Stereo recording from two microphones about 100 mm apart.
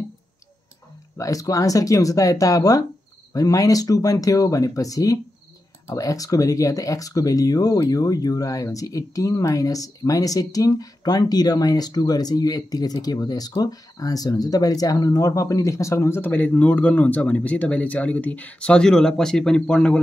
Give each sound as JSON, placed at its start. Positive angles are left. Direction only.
{"t": 1.1, "sound": "speech", "side_deg": 35}